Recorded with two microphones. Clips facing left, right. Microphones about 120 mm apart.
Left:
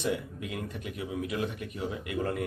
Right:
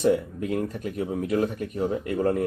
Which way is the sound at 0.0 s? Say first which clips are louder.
Right 9 dB; 40° right (ahead or behind).